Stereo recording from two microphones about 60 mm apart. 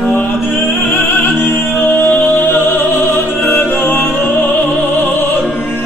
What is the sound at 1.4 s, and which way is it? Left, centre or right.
Music, left.